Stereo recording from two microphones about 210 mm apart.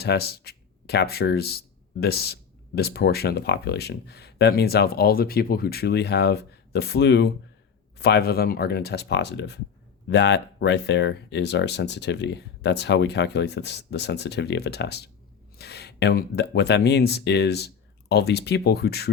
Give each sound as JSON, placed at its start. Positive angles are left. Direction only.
{"t": 0.0, "sound": "speech", "side_deg": 50}